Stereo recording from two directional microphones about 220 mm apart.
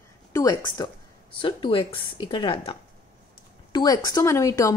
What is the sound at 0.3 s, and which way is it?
Speech, 15° left (ahead or behind).